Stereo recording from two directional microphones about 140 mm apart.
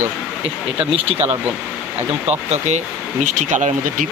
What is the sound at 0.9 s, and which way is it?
Speech, 45° right (ahead or behind).